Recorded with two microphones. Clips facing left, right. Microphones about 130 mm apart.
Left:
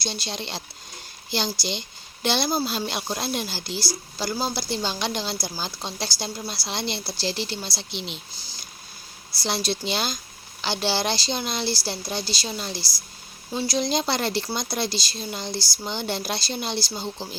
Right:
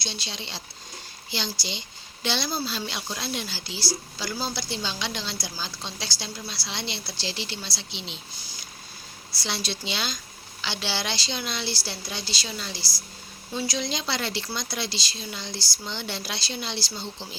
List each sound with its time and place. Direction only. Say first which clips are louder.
0.0 s a woman's voice: left 5 dB; 45° left (ahead or behind)
9.3 s a woman's voice: left 5 dB; 40° left (ahead or behind)